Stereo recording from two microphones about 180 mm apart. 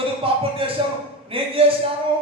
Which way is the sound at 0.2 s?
30° right (ahead or behind).